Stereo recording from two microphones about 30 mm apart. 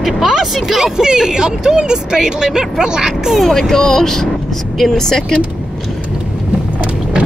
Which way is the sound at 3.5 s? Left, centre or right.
Centre.